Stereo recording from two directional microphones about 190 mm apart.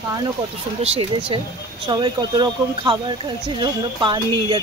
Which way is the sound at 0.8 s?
30° right (ahead or behind).